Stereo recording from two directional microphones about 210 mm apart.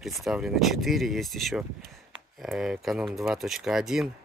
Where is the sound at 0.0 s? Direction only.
Centre (ahead or behind).